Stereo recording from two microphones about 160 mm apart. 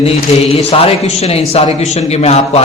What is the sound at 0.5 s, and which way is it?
A man's voice, 35° left (ahead or behind).